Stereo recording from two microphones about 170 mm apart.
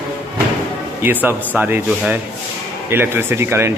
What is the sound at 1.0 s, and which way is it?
Speech, 10° right (ahead or behind).